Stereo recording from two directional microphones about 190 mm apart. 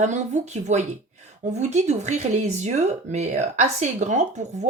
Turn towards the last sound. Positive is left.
turn(degrees=-40)  # may be behind; listen again after turning